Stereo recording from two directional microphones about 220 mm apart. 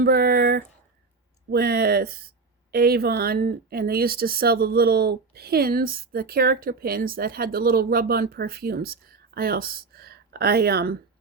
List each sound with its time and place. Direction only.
0.0 s speech: 45° right (ahead or behind)